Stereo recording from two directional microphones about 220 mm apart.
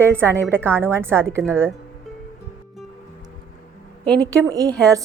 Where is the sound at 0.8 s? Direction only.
10° right (ahead or behind).